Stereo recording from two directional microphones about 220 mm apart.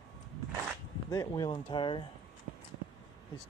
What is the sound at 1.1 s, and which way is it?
Speech, 15° left (ahead or behind).